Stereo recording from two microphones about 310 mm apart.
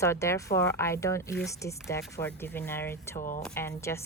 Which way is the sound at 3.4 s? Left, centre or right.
Centre.